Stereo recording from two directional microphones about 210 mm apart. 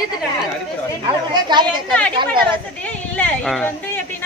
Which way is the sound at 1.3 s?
20° right (ahead or behind).